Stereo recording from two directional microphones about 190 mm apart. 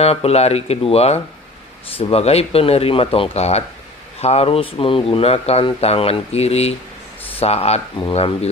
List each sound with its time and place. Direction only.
0.0 s speech: 35° left (ahead or behind)